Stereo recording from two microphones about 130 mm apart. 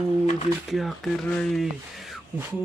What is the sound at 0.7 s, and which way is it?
Speech, centre (ahead or behind).